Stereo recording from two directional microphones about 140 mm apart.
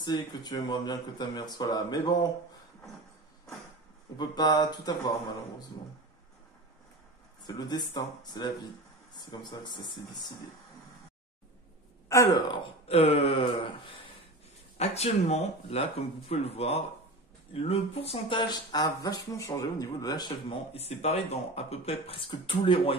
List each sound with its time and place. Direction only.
0.0 s speech: 30° left (ahead or behind)
4.2 s speech: 30° left (ahead or behind)
7.4 s speech: 30° left (ahead or behind)
12.1 s speech: 20° left (ahead or behind)
12.4 s speech: 40° left (ahead or behind)
14.8 s speech: 50° left (ahead or behind)
18.5 s speech: 30° left (ahead or behind)
20.7 s speech: 50° left (ahead or behind)